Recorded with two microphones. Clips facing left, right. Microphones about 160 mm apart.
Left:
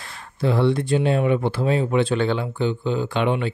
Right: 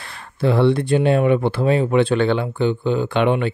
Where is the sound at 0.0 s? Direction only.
65° right (ahead or behind).